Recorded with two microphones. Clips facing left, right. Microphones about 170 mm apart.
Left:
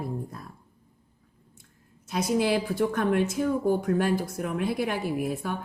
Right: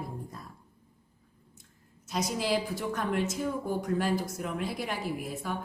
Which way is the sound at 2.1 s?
55° left (ahead or behind).